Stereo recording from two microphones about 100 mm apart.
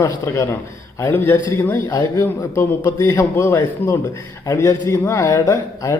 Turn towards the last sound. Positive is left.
turn(degrees=35)  # may be behind; listen again after turning